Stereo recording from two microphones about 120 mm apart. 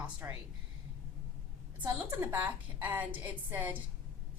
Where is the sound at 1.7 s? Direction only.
15° right (ahead or behind).